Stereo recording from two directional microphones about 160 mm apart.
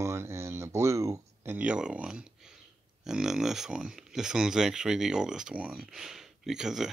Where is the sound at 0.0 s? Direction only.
15° right (ahead or behind).